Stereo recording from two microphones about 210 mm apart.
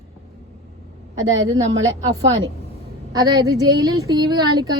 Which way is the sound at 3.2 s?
15° right (ahead or behind).